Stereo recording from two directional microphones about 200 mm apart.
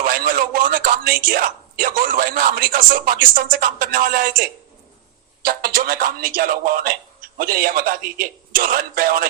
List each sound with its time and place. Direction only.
0.0 s a man's voice: 45° right (ahead or behind)
5.5 s a man's voice: 50° right (ahead or behind)